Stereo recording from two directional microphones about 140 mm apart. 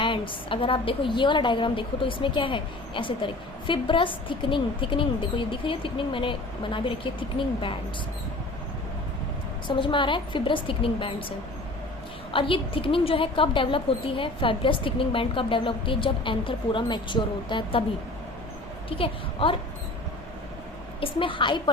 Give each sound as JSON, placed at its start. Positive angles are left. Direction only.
{"t": 0.0, "sound": "a woman's voice", "side_deg": 35}
{"t": 9.6, "sound": "a woman's voice", "side_deg": 35}
{"t": 18.9, "sound": "a woman's voice", "side_deg": 40}
{"t": 21.0, "sound": "a woman's voice", "side_deg": 40}